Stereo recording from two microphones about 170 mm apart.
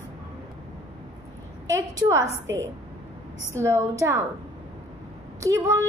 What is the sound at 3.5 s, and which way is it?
Speech, 15° right (ahead or behind).